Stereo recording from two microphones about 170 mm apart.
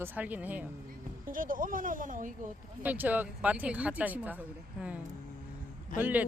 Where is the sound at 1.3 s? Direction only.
55° right (ahead or behind).